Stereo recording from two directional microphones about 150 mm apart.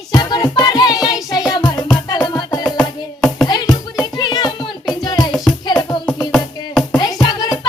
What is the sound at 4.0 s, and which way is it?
Music, 30° left (ahead or behind).